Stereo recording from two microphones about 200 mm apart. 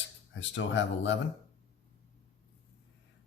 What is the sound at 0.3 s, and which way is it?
Speech, 65° left (ahead or behind).